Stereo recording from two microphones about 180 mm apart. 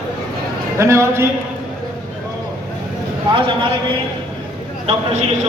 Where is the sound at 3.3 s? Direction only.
30° right (ahead or behind).